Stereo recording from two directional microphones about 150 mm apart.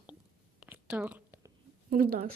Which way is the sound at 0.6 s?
10° right (ahead or behind).